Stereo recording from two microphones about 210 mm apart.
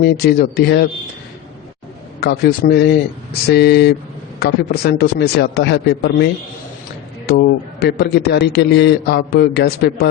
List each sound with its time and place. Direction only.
0.0 s a man's voice: 50° left (ahead or behind)
2.2 s a man's voice: 50° left (ahead or behind)
7.3 s a man's voice: 50° left (ahead or behind)